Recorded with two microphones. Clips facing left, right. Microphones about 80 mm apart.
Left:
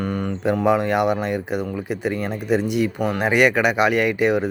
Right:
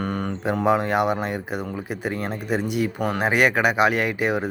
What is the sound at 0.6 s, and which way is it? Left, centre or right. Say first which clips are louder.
Speech: left 1 dB; right.